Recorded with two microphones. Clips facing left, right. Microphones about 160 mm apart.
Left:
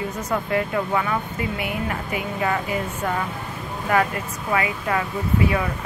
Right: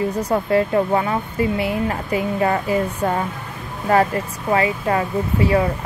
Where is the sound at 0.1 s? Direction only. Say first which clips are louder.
Right 6 dB; 35° right (ahead or behind).